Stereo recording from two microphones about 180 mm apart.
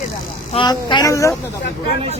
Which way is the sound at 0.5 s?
25° left (ahead or behind).